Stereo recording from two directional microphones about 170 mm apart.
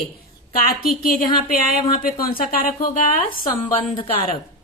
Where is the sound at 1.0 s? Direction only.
55° left (ahead or behind).